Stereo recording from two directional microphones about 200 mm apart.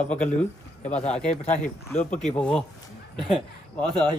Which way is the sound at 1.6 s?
35° left (ahead or behind).